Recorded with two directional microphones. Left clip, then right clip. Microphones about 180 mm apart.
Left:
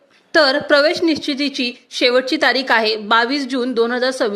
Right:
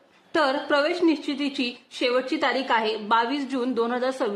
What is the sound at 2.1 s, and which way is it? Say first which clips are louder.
A woman's voice: left 8 dB; 25° left (ahead or behind).